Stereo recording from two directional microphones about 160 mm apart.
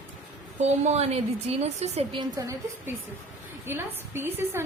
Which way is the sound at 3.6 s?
15° right (ahead or behind).